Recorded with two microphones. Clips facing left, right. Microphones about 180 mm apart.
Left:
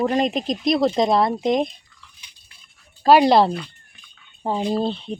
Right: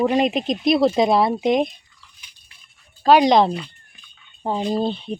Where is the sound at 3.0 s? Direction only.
5° left (ahead or behind).